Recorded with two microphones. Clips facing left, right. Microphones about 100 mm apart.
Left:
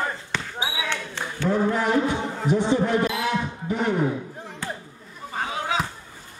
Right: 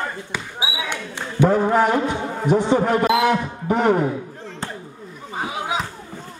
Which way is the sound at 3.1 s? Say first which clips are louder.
Right 8 dB; 70° right (ahead or behind).